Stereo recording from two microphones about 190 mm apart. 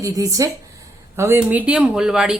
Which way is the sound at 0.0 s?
15° right (ahead or behind).